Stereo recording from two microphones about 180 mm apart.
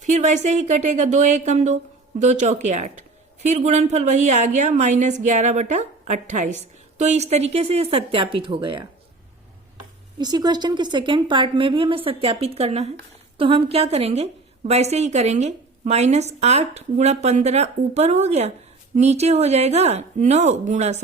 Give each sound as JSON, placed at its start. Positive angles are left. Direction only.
{"t": 0.0, "sound": "a woman's voice", "side_deg": -40}
{"t": 10.2, "sound": "a woman's voice", "side_deg": -20}